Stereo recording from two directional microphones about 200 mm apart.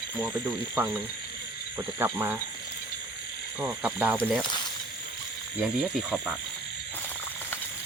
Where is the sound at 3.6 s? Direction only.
10° right (ahead or behind).